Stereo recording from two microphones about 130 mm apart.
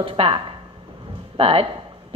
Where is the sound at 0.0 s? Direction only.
45° right (ahead or behind).